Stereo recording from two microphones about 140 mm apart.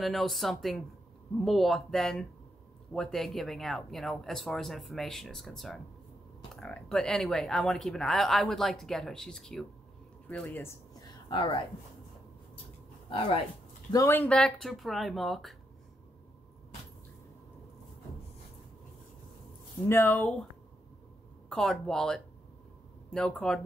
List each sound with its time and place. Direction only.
0.0 s speech: centre (ahead or behind); by 11.1 s 20° left (ahead or behind)
11.2 s speech: 35° left (ahead or behind)
13.9 s speech: 15° left (ahead or behind)
14.3 s speech: 5° left (ahead or behind)
19.9 s speech: 15° left (ahead or behind)
21.5 s speech: 5° left (ahead or behind)